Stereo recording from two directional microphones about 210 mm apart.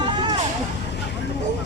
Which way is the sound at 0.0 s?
20° right (ahead or behind).